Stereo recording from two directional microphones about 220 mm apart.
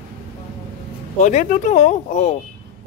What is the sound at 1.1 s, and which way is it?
Speech, 35° left (ahead or behind).